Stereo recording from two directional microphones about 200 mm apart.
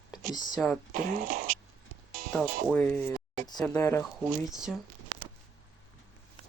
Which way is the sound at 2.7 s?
10° left (ahead or behind).